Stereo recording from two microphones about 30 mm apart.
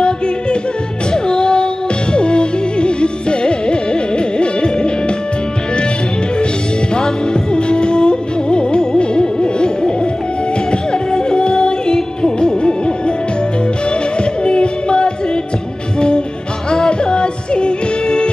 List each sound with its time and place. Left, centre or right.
1.1 s music: left
7.0 s music: left
14.4 s music: left
16.7 s music: left